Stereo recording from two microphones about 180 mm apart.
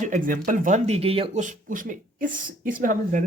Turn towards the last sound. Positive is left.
turn(degrees=-45)  # may be behind; listen again after turning